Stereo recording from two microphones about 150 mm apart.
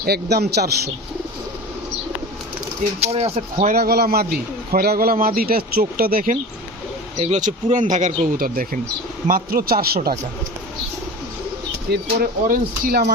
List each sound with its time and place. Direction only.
0.0 s a man's voice: 90° right
3.0 s speech: 45° right (ahead or behind)
3.8 s a man's voice: 90° right
7.2 s speech: 50° right (ahead or behind); by 10.2 s 90° right
11.9 s speech: 75° right (ahead or behind)